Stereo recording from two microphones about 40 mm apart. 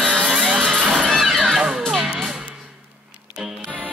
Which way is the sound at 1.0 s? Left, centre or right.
Centre.